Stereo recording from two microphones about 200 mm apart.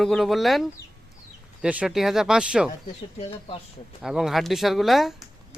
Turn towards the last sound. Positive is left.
turn(degrees=0)  # may be behind; listen again after turning